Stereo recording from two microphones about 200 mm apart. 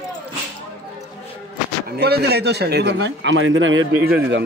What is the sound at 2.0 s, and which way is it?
A man's voice, 55° right (ahead or behind).